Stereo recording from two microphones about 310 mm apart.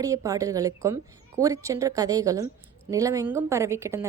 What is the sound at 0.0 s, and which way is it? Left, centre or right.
A woman's voice, centre.